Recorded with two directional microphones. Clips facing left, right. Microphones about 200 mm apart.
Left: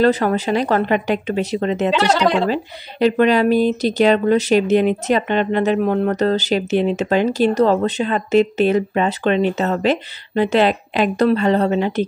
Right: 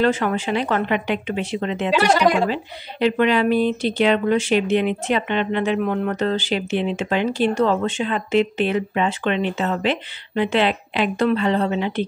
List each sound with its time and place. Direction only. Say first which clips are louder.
0.0 s speech: left 4 dB; 40° left (ahead or behind)
1.9 s speech: right 1 dB; 10° right (ahead or behind)
2.5 s speech: left 4 dB; 40° left (ahead or behind)